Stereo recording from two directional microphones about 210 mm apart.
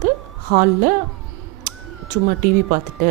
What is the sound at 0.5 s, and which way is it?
Speech, 40° right (ahead or behind).